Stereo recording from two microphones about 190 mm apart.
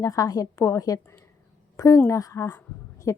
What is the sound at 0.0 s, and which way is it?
A woman's voice, 20° left (ahead or behind).